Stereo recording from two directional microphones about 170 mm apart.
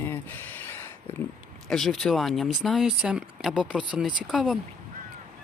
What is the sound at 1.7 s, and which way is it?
Speech, centre (ahead or behind).